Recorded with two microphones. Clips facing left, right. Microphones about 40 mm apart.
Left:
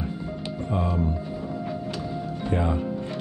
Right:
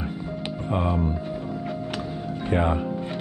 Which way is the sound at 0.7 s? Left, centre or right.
Right.